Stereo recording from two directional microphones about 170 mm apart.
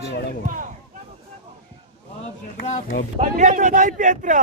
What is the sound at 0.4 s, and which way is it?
Speech, 50° right (ahead or behind).